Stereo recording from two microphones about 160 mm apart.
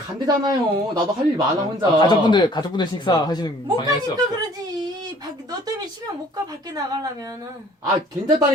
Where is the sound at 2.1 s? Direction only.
30° left (ahead or behind).